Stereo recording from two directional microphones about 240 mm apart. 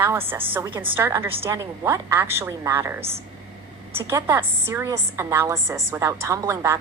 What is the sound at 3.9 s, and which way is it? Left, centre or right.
A woman's voice, centre.